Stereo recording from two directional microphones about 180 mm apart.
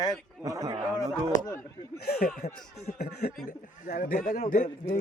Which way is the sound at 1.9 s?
60° left (ahead or behind).